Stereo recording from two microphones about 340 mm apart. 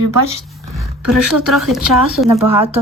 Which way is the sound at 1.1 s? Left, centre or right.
Centre.